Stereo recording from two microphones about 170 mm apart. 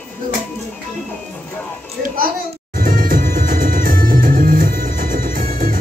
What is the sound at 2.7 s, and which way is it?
Music, 55° right (ahead or behind).